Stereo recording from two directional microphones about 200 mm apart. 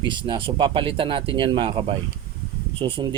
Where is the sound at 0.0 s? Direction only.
25° right (ahead or behind).